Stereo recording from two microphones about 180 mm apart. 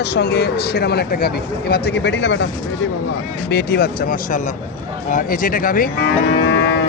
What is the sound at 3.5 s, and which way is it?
Speech, 65° left (ahead or behind).